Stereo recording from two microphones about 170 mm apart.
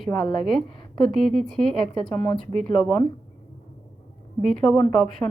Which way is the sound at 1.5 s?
5° left (ahead or behind).